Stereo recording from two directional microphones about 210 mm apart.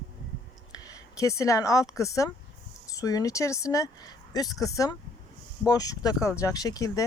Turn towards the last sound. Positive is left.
turn(degrees=15)  # may be behind; listen again after turning